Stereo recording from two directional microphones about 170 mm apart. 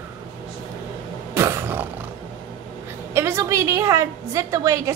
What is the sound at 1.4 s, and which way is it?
Roar, 15° right (ahead or behind).